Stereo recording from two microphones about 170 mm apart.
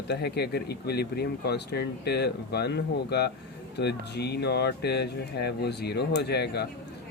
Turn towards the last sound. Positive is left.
turn(degrees=75)  # may be behind; listen again after turning